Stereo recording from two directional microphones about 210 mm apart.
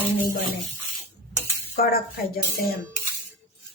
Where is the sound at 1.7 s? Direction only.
45° left (ahead or behind).